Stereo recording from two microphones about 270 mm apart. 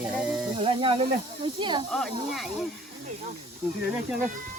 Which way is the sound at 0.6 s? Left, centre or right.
Centre.